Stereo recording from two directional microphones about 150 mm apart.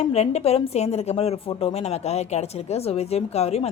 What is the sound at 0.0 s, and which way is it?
A woman's voice, 45° left (ahead or behind).